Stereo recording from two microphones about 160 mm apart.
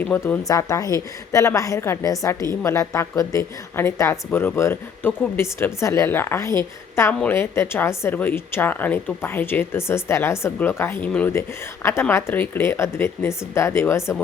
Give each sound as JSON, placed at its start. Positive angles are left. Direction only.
{"t": 0.0, "sound": "a woman's voice", "side_deg": 10}
{"t": 0.4, "sound": "a woman's voice", "side_deg": 20}